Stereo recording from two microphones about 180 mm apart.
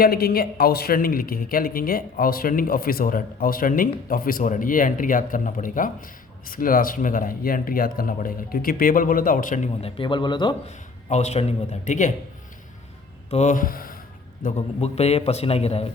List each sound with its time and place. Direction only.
0.0 s a man's voice: 60° left (ahead or behind)
9.8 s speech: 25° left (ahead or behind)
10.7 s a man's voice: 40° left (ahead or behind)
13.3 s speech: 45° left (ahead or behind)
14.4 s a man's voice: 35° left (ahead or behind)